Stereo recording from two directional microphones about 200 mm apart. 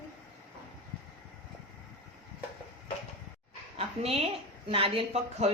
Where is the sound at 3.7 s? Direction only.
30° right (ahead or behind).